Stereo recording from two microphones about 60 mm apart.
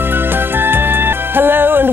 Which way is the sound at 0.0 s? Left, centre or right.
Right.